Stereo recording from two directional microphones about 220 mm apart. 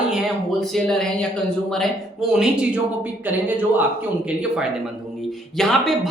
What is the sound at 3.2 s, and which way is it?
Speech, 10° right (ahead or behind).